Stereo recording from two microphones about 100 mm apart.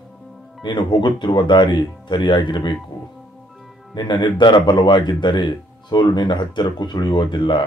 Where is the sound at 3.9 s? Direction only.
50° left (ahead or behind).